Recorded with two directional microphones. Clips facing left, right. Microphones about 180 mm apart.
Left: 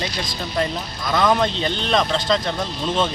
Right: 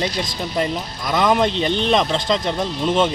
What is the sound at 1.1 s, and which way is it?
Speech, 10° right (ahead or behind).